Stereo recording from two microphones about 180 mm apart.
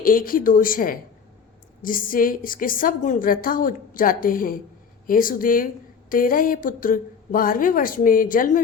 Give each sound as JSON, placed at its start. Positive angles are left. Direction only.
{"t": 0.0, "sound": "a woman's voice", "side_deg": 50}